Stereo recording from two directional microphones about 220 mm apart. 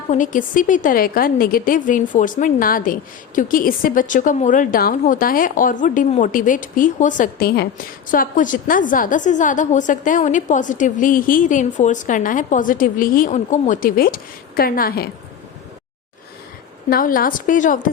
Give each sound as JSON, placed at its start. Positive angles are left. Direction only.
{"t": 0.1, "sound": "a woman's voice", "side_deg": 35}
{"t": 16.9, "sound": "a woman's voice", "side_deg": 40}